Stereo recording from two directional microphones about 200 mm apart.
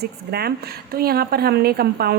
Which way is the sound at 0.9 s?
50° right (ahead or behind).